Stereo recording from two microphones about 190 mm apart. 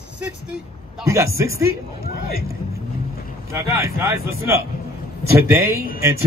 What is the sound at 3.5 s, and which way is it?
A man's voice, 15° right (ahead or behind).